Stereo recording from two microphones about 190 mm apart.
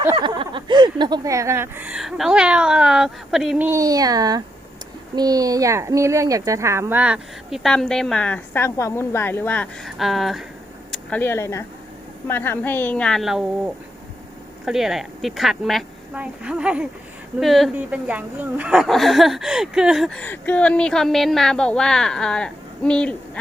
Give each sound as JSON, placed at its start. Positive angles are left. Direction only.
{"t": 0.2, "sound": "speech", "side_deg": -25}
{"t": 3.7, "sound": "a woman's voice", "side_deg": -20}
{"t": 14.6, "sound": "a woman's voice", "side_deg": 0}